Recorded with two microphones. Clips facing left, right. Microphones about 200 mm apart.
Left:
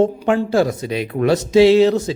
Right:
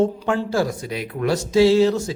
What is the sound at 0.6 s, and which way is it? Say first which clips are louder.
Speech: left 5 dB; 25° left (ahead or behind).